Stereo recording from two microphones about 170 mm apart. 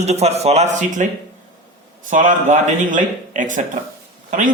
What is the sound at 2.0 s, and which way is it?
A man's voice, 50° right (ahead or behind).